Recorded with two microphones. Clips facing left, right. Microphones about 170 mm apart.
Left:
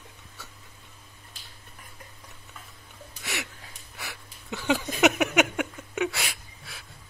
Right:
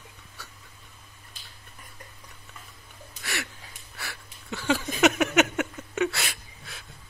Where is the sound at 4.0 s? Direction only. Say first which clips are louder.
Even; 15° left (ahead or behind).